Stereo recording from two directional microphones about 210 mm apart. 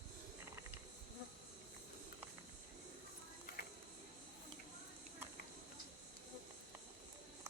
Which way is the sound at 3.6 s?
45° left (ahead or behind).